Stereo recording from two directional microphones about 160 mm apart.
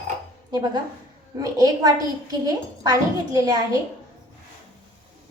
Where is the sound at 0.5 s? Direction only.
25° right (ahead or behind).